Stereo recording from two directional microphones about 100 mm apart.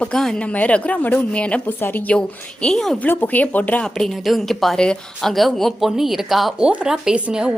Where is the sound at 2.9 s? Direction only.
20° left (ahead or behind).